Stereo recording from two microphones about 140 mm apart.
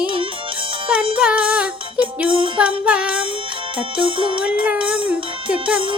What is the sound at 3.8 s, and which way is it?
Music, 40° right (ahead or behind).